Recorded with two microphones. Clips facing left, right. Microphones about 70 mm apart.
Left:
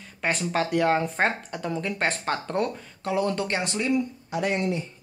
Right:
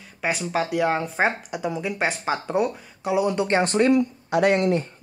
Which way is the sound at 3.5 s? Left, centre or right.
Right.